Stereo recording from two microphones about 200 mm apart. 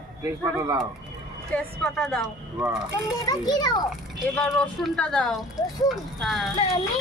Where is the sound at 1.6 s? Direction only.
5° left (ahead or behind).